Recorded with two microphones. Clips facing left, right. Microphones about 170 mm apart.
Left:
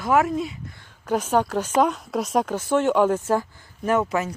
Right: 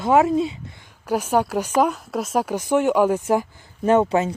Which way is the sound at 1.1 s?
10° right (ahead or behind).